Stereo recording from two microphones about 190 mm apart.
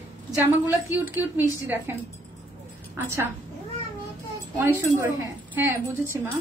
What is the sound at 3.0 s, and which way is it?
Speech, 10° right (ahead or behind).